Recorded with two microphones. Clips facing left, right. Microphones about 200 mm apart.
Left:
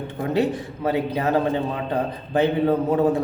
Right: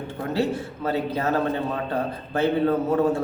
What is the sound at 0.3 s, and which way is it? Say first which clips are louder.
A man's voice: left 2 dB; 15° left (ahead or behind).